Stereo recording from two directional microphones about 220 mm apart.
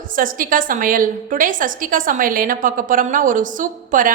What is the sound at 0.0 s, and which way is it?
A woman's voice, 40° right (ahead or behind).